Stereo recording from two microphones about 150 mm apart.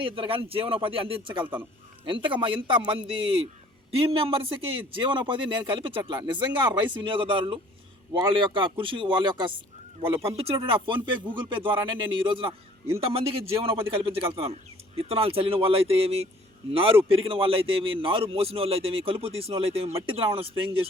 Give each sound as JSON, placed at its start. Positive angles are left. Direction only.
{"t": 0.0, "sound": "a man's voice", "side_deg": -35}